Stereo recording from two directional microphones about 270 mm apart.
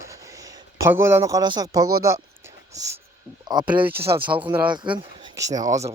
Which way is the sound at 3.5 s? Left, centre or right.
Centre.